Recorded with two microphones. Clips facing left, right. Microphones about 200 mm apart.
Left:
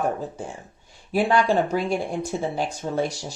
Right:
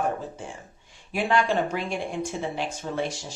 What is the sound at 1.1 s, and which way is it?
Speech, 35° left (ahead or behind).